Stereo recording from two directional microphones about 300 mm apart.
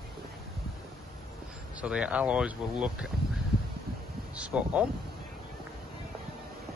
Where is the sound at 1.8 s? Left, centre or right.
Centre.